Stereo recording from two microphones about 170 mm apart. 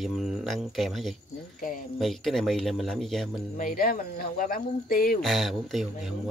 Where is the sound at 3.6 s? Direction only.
60° left (ahead or behind).